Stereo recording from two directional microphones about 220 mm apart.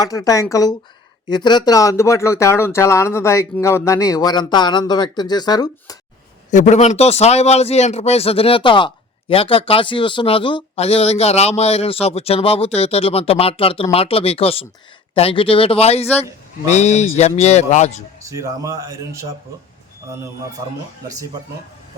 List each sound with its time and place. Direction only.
0.0 s speech: 15° left (ahead or behind)
6.5 s speech: 35° left (ahead or behind)
18.2 s speech: 15° right (ahead or behind)